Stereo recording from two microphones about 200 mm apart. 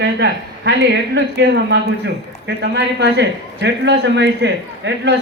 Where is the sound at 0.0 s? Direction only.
60° right (ahead or behind).